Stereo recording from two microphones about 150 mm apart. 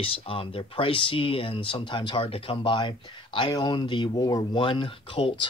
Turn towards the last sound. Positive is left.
turn(degrees=35)  # may be behind; listen again after turning